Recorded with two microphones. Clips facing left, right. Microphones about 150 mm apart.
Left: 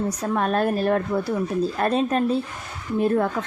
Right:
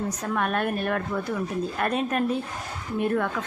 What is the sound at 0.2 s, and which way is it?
A woman's voice, 30° left (ahead or behind).